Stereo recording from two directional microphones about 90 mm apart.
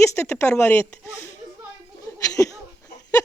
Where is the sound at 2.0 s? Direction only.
40° left (ahead or behind).